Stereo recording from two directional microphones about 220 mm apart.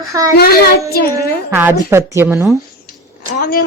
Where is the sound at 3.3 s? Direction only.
40° left (ahead or behind).